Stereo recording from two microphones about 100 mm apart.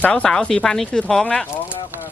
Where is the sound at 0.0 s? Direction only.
10° left (ahead or behind).